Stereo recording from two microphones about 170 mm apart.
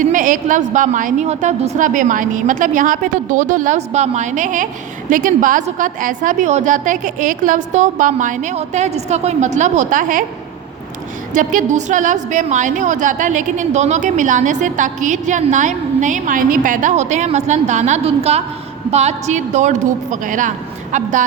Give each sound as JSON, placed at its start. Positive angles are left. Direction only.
{"t": 0.0, "sound": "a woman's voice", "side_deg": -50}
{"t": 11.3, "sound": "a woman's voice", "side_deg": -50}